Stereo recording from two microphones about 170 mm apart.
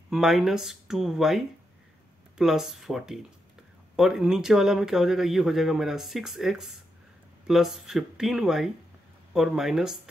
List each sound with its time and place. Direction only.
0.1 s speech: centre (ahead or behind)